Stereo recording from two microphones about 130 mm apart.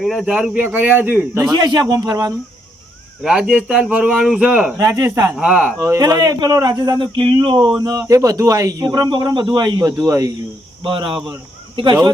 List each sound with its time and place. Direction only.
0.0 s speech: centre (ahead or behind)
1.5 s speech: 30° right (ahead or behind)
3.2 s speech: 5° right (ahead or behind)
4.8 s speech: 30° right (ahead or behind)
5.4 s speech: 5° right (ahead or behind)
5.8 s speech: 25° right (ahead or behind)
10.8 s speech: 40° right (ahead or behind)